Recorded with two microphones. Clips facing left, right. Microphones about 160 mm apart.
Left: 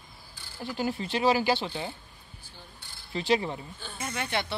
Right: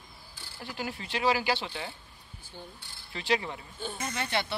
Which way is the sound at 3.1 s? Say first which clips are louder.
Left 4 dB; 30° left (ahead or behind).